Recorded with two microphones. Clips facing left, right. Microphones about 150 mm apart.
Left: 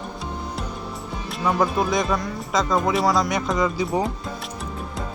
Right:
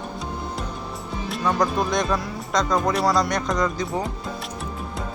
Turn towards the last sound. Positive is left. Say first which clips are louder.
# left 1 dB
turn(degrees=5)  # may be behind; listen again after turning